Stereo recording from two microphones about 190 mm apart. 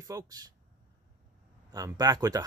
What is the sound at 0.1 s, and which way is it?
Speech, 20° right (ahead or behind).